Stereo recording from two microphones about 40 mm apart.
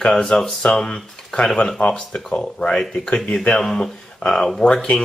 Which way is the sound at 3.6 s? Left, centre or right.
Centre.